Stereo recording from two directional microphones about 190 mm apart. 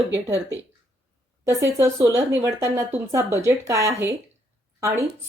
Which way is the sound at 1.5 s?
15° right (ahead or behind).